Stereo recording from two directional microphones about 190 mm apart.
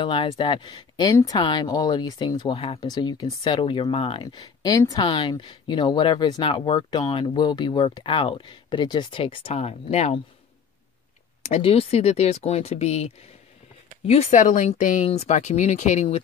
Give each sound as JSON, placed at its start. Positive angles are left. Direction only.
{"t": 0.0, "sound": "speech", "side_deg": 25}
{"t": 11.4, "sound": "speech", "side_deg": 30}